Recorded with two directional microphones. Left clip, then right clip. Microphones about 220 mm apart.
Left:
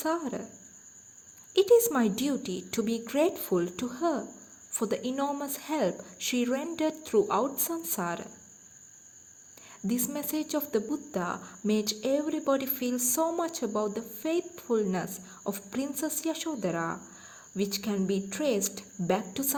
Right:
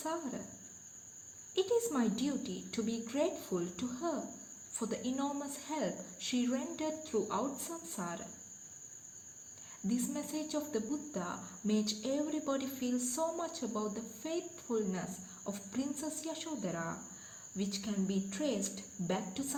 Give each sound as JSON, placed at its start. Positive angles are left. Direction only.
{"t": 0.0, "sound": "speech", "side_deg": 50}
{"t": 1.5, "sound": "speech", "side_deg": 50}
{"t": 9.8, "sound": "speech", "side_deg": 50}